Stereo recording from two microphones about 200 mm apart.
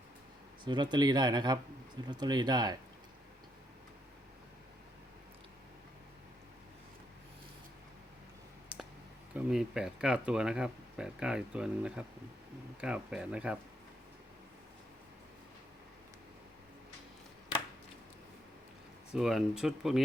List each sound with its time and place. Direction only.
0.6 s speech: 20° right (ahead or behind)
9.3 s speech: 5° right (ahead or behind)
19.1 s speech: 5° right (ahead or behind)